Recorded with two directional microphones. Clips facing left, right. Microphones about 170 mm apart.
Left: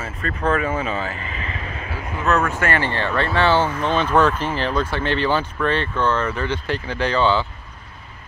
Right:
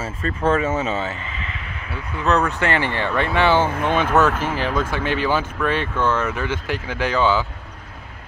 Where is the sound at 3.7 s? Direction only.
55° right (ahead or behind).